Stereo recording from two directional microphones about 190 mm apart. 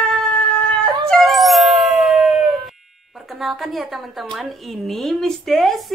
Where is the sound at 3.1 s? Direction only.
Centre (ahead or behind).